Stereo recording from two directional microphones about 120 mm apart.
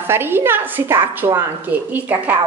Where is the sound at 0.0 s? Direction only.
20° right (ahead or behind).